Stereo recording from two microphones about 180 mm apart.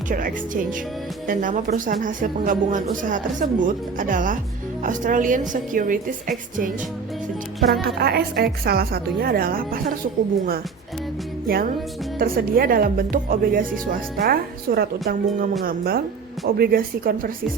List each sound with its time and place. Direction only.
0.1 s speech: 50° right (ahead or behind)
7.8 s a woman's voice: 60° right (ahead or behind)
11.4 s music: 55° right (ahead or behind)
12.2 s a woman's voice: 55° right (ahead or behind)